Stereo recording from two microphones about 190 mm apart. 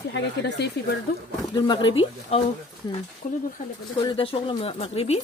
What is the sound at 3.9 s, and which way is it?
Speech, 30° left (ahead or behind).